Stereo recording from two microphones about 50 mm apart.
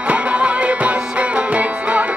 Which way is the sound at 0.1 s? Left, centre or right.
Right.